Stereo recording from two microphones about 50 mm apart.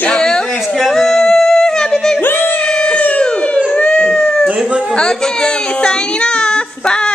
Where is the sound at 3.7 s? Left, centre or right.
Left.